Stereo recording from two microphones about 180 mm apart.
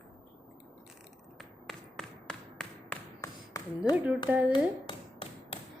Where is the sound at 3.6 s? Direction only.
20° left (ahead or behind).